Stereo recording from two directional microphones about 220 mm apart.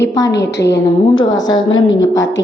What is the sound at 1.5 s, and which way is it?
Speech, 60° left (ahead or behind).